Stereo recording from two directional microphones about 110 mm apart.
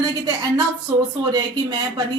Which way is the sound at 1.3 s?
40° right (ahead or behind).